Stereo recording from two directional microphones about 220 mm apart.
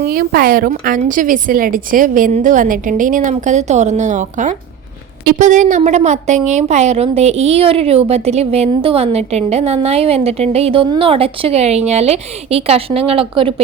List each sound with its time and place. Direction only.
0.0 s a woman's voice: 40° right (ahead or behind); by 13.5 s 25° right (ahead or behind)